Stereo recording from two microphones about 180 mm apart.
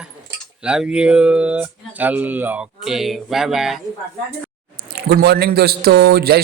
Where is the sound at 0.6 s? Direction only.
5° right (ahead or behind).